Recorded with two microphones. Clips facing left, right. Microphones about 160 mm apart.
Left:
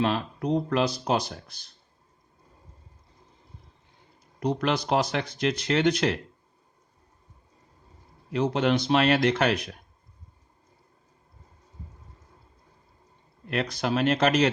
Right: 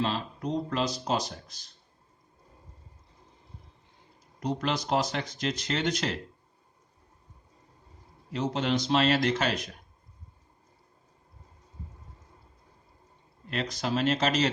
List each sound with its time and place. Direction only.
0.0 s speech: 60° left (ahead or behind)
4.4 s speech: 60° left (ahead or behind)
8.3 s speech: 60° left (ahead or behind)
13.5 s speech: 60° left (ahead or behind)